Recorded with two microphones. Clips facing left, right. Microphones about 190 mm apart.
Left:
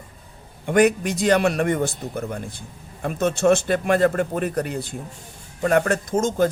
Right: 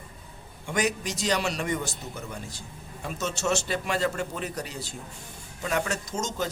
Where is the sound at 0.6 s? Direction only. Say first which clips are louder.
Left 10 dB; 55° left (ahead or behind).